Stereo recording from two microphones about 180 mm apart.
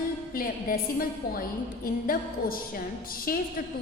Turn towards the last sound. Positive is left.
turn(degrees=55)  # may be behind; listen again after turning